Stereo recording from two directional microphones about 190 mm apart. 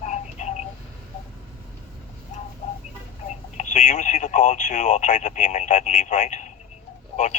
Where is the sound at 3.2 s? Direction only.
40° left (ahead or behind).